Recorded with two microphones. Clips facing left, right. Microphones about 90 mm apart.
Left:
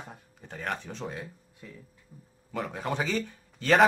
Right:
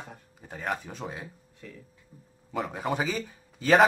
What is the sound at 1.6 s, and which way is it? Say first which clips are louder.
Speech: right 1 dB; 10° left (ahead or behind).